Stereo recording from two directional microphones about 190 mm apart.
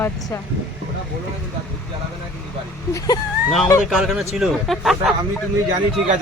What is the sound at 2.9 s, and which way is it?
Speech, 15° left (ahead or behind).